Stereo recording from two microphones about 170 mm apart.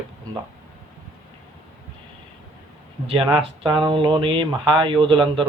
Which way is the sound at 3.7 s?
30° right (ahead or behind).